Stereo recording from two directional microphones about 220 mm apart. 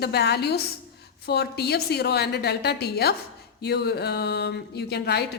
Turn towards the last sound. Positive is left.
turn(degrees=50)  # may be behind; listen again after turning